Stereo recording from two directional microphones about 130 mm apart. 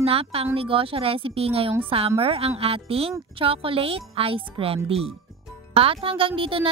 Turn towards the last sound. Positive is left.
turn(degrees=-45)  # may be behind; listen again after turning